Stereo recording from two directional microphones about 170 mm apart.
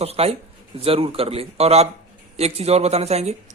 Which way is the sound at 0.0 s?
35° right (ahead or behind).